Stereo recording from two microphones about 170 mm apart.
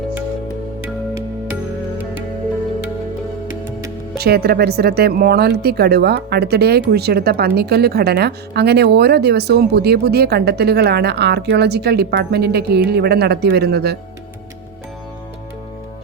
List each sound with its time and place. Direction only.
4.2 s speech: 70° right (ahead or behind)